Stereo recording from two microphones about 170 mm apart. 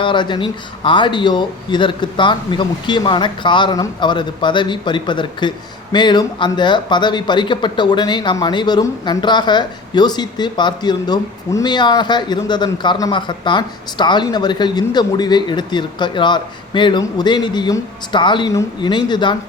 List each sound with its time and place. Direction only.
0.0 s speech: 30° left (ahead or behind)